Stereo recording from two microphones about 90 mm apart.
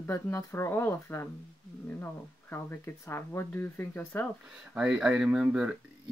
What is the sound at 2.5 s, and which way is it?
Speech, 30° left (ahead or behind).